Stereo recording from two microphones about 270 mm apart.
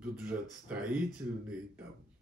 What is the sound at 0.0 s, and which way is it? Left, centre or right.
Speech, centre.